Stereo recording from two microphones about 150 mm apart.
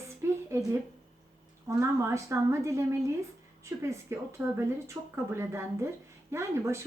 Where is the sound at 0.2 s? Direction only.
20° right (ahead or behind).